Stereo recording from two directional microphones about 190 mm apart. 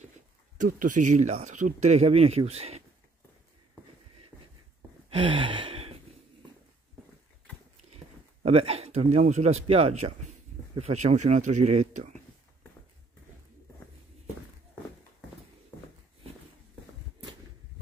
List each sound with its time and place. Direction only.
0.6 s speech: 45° right (ahead or behind)
4.3 s a sound: 10° left (ahead or behind)
5.1 s gasp: 25° right (ahead or behind)
7.9 s speech: 35° right (ahead or behind)